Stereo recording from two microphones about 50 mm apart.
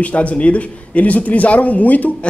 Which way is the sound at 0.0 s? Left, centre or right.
Left.